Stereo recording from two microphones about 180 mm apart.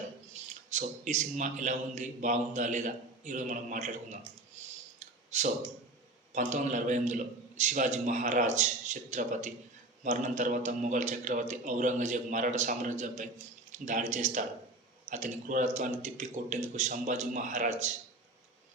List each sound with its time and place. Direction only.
0.7 s a man's voice: 40° right (ahead or behind)
4.9 s a sound: 40° right (ahead or behind)
6.3 s a man's voice: 45° right (ahead or behind)